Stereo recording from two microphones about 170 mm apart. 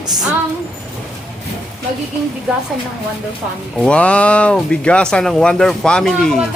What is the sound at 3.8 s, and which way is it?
Speech, 5° left (ahead or behind).